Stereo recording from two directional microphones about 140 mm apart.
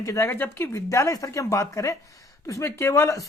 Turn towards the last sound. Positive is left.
turn(degrees=20)  # may be behind; listen again after turning